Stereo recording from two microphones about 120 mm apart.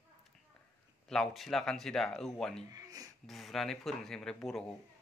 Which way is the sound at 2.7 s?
30° right (ahead or behind).